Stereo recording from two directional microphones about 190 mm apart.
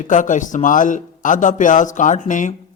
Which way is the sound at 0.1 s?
40° left (ahead or behind).